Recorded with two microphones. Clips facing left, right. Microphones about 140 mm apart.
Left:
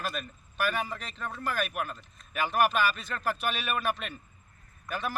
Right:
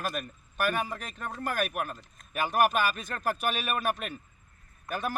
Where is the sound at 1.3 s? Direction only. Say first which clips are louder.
Right 2 dB; 45° right (ahead or behind).